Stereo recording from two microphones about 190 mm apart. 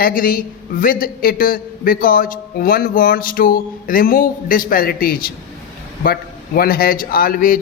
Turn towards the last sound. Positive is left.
turn(degrees=50)  # may be behind; listen again after turning